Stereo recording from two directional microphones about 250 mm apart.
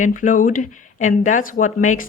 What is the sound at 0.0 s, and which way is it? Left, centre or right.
Speech, left.